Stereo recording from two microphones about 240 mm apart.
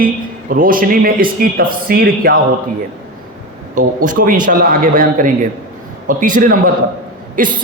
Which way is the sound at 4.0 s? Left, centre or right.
Right.